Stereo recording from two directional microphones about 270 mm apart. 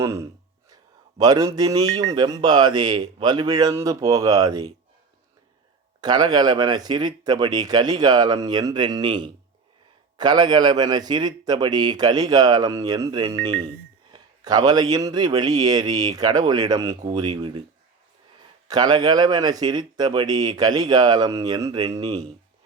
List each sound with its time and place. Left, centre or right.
0.0 s speech: centre
6.0 s speech: centre
18.7 s speech: centre